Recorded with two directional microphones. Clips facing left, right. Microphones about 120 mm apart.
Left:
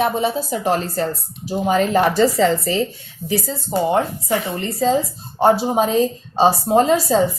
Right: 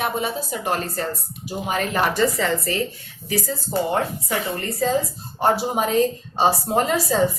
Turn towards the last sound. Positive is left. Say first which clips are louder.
# left 6 dB
turn(degrees=25)  # may be behind; listen again after turning